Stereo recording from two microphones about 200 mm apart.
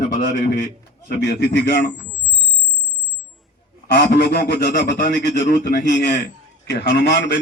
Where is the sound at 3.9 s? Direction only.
55° left (ahead or behind).